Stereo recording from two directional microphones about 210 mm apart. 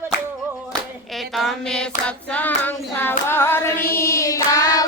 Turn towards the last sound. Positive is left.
turn(degrees=15)  # may be behind; listen again after turning